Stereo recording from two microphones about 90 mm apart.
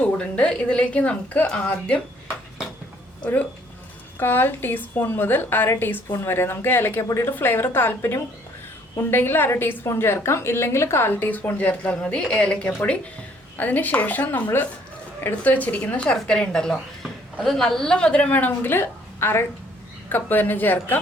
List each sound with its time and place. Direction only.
0.0 s speech: 15° left (ahead or behind)
4.2 s a woman's voice: 20° left (ahead or behind)